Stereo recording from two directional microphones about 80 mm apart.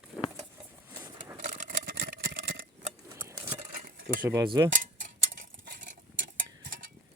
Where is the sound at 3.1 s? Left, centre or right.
Right.